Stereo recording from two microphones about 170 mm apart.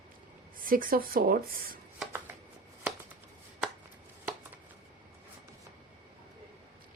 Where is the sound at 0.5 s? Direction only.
55° right (ahead or behind).